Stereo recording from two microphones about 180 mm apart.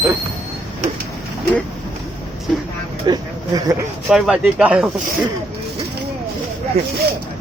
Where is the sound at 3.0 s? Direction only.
20° right (ahead or behind).